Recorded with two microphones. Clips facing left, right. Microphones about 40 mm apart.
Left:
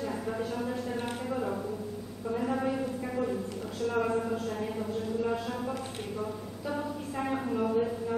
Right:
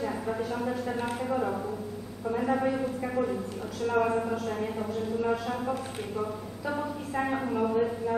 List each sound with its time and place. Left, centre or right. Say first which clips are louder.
0.6 s speech: right 2 dB; centre